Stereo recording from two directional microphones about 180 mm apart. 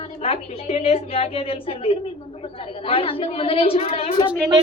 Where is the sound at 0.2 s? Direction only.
35° left (ahead or behind).